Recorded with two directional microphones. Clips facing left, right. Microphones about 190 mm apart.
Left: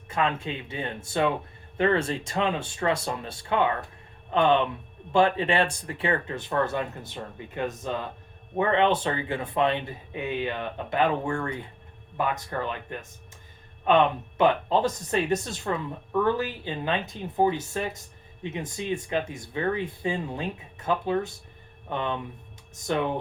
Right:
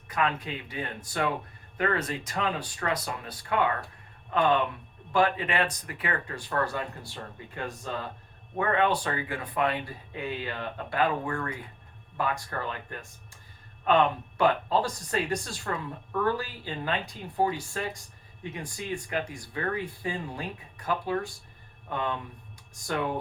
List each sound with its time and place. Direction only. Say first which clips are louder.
0.1 s speech: left 2 dB; 25° left (ahead or behind)